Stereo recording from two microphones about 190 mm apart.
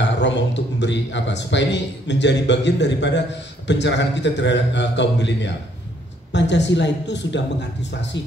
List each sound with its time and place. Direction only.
0.2 s a man's voice: 70° left (ahead or behind)